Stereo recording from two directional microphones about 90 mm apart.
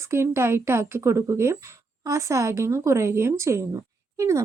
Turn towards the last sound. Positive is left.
turn(degrees=-35)  # may be behind; listen again after turning